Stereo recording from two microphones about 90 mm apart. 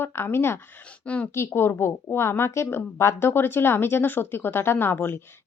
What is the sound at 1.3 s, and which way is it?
A woman's voice, 25° left (ahead or behind).